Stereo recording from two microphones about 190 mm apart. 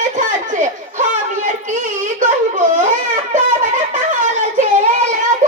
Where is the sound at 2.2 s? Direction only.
40° right (ahead or behind).